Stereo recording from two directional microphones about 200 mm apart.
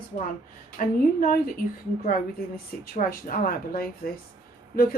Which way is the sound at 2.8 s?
45° left (ahead or behind).